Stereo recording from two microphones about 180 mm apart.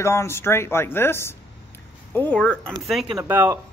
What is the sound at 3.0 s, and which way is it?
Speech, 15° right (ahead or behind).